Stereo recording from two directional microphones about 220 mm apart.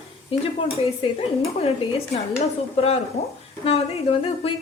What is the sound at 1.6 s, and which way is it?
A woman's voice, 25° left (ahead or behind).